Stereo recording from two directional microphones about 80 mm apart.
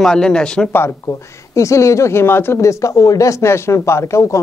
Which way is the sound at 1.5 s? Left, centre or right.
Left.